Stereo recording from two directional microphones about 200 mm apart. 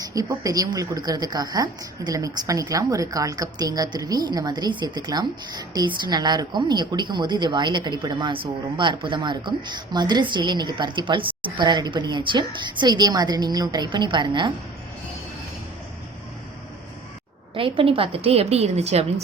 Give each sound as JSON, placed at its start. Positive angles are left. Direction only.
{"t": 0.0, "sound": "a woman's voice", "side_deg": -15}
{"t": 17.5, "sound": "a woman's voice", "side_deg": -25}